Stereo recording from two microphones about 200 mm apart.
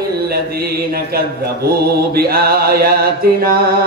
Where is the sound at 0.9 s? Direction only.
50° right (ahead or behind).